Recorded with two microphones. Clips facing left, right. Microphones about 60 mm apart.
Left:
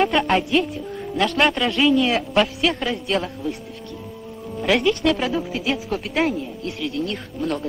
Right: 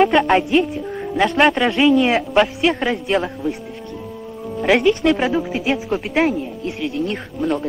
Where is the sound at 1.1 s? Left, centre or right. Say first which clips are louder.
Right 4 dB; centre.